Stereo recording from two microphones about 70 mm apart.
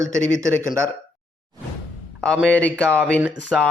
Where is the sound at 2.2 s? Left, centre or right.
Centre.